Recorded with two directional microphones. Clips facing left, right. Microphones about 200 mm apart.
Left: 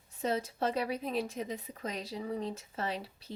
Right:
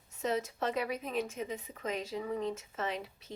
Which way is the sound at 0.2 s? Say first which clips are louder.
Left 1 dB; 35° left (ahead or behind).